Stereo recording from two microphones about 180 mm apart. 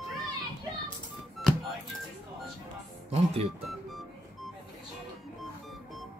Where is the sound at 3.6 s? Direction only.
Centre (ahead or behind).